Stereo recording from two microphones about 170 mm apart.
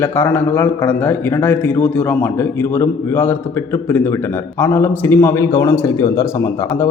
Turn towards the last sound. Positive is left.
turn(degrees=20)  # may be behind; listen again after turning